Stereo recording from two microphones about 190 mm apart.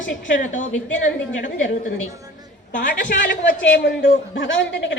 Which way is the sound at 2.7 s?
45° left (ahead or behind).